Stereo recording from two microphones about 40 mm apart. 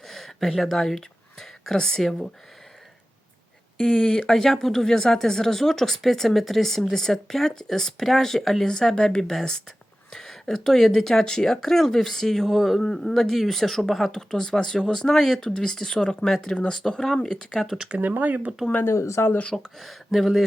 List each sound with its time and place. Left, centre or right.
0.1 s a sound: centre
0.6 s speech: centre
4.3 s speech: centre
12.5 s speech: centre
12.8 s speech: centre
14.1 s speech: centre
16.6 s speech: left
16.9 s speech: centre
18.0 s speech: right
18.9 s speech: left
19.8 s speech: centre